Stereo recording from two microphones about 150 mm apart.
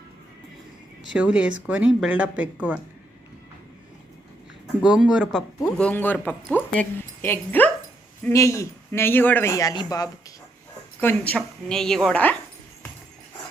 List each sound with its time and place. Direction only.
1.1 s speech: 10° right (ahead or behind)
4.8 s speech: 5° right (ahead or behind)
5.6 s a woman's voice: 10° left (ahead or behind); by 10.1 s 25° left (ahead or behind)
11.0 s a woman's voice: 10° left (ahead or behind)